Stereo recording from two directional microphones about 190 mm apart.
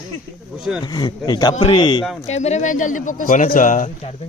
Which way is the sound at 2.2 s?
35° left (ahead or behind).